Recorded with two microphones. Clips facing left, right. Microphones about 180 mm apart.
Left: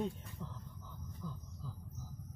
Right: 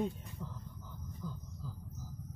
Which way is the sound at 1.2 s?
10° right (ahead or behind).